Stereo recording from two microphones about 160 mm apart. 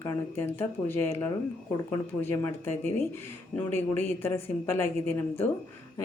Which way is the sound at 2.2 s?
15° left (ahead or behind).